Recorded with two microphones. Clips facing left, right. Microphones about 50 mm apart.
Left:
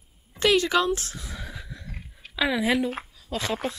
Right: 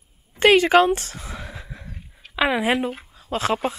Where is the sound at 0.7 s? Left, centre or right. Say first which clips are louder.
Right 7 dB; right.